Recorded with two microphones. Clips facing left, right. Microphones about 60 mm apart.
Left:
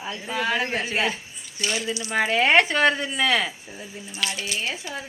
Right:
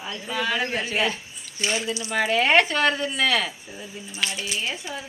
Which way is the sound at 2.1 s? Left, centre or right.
Left.